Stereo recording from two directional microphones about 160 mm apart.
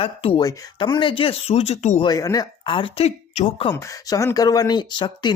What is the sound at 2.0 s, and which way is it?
Speech, 25° left (ahead or behind).